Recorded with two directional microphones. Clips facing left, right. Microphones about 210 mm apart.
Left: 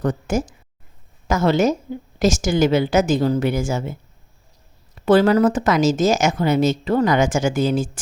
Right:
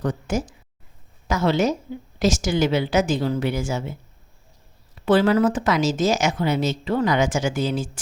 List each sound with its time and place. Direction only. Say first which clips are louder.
0.0 s a woman's voice: left 3 dB; 45° left (ahead or behind)
5.0 s a woman's voice: left 3 dB; 45° left (ahead or behind)